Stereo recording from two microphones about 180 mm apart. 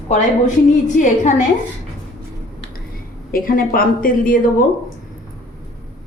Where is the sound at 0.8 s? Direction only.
45° left (ahead or behind).